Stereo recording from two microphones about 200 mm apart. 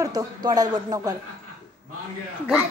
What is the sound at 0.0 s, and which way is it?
Speech, 20° right (ahead or behind).